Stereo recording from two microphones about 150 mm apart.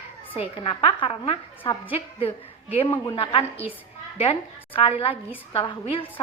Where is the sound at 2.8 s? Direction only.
40° left (ahead or behind).